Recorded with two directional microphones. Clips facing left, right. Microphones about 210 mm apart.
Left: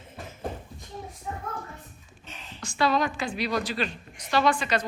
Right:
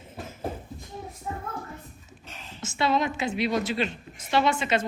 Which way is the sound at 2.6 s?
25° right (ahead or behind).